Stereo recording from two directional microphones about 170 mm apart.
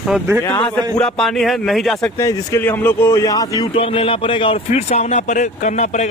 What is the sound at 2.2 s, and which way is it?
Speech, 20° left (ahead or behind).